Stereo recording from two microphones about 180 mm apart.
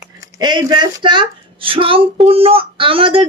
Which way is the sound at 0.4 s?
25° right (ahead or behind).